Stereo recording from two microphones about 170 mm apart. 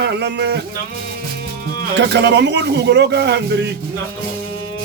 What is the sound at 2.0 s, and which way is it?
Speech, 90° right.